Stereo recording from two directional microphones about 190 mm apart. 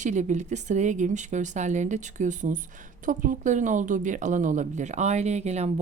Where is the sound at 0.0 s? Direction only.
40° right (ahead or behind).